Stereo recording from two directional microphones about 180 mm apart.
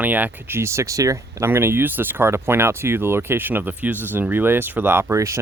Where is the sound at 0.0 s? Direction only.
10° right (ahead or behind).